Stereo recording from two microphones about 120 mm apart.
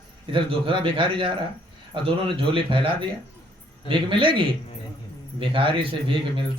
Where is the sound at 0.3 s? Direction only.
45° right (ahead or behind).